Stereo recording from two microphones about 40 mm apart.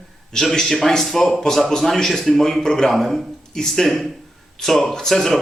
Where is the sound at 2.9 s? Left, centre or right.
Centre.